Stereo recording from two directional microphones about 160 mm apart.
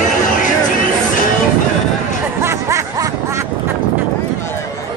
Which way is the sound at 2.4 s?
15° right (ahead or behind).